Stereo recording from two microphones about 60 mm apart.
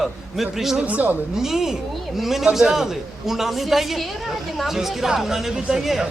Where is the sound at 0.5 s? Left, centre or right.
Centre.